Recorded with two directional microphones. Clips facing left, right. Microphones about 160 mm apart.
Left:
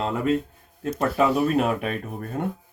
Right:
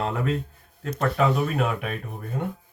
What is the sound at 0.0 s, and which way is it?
Speech, 20° left (ahead or behind).